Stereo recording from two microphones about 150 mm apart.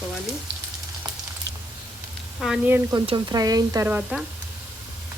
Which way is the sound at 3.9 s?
5° right (ahead or behind).